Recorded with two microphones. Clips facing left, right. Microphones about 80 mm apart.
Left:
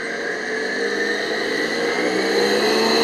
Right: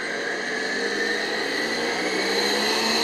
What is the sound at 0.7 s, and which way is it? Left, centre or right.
Vehicle, left.